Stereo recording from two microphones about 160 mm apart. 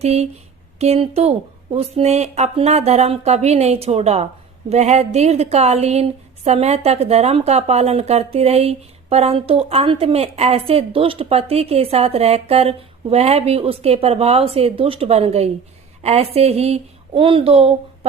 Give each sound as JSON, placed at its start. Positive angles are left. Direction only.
{"t": 0.0, "sound": "a woman's voice", "side_deg": -40}